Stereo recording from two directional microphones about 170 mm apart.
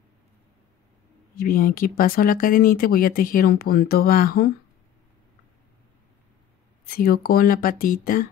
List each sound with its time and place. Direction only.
1.3 s speech: 60° left (ahead or behind)
6.9 s speech: 60° left (ahead or behind)